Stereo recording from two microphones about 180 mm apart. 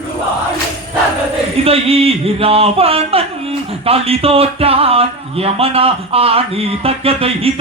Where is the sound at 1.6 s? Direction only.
35° right (ahead or behind).